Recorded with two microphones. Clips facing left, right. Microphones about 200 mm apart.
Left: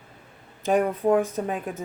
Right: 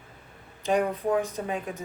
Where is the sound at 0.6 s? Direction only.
50° left (ahead or behind).